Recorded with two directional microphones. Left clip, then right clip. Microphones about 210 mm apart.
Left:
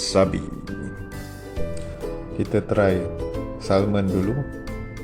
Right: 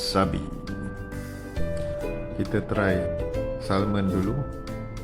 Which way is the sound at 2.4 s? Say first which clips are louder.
Left 6 dB; 15° left (ahead or behind).